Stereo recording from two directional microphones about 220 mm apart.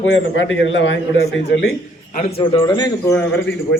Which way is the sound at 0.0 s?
55° left (ahead or behind).